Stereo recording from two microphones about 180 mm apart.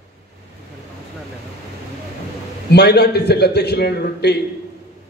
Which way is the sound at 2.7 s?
65° left (ahead or behind).